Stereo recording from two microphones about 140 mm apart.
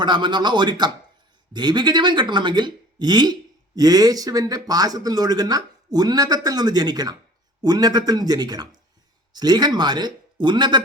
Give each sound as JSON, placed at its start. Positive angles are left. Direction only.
{"t": 0.0, "sound": "speech", "side_deg": -35}